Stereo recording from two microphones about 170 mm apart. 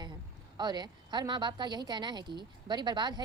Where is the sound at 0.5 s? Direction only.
25° right (ahead or behind).